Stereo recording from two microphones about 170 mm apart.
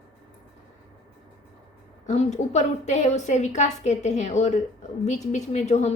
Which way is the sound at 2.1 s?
40° left (ahead or behind).